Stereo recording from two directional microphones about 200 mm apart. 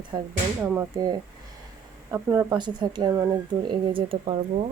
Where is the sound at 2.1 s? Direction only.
15° right (ahead or behind).